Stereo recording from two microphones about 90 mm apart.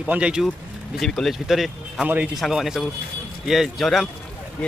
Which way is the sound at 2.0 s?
15° right (ahead or behind).